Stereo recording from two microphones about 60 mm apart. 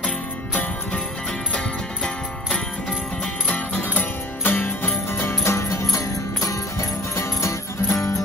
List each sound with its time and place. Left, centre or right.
3.4 s music: left
5.1 s music: left